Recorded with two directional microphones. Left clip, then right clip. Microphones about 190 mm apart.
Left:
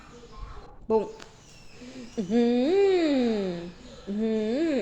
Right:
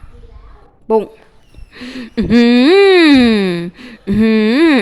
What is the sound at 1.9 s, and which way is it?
Speech, 55° right (ahead or behind).